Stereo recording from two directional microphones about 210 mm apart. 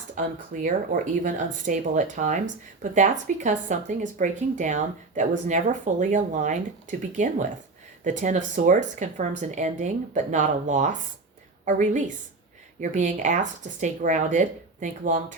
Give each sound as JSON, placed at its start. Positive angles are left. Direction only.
{"t": 0.2, "sound": "speech", "side_deg": -40}